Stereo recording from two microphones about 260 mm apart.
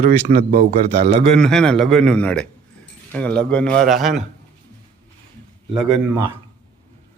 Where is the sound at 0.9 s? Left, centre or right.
Right.